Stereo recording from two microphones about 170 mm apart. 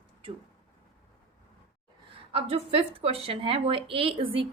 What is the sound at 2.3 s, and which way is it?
A woman's voice, 35° right (ahead or behind).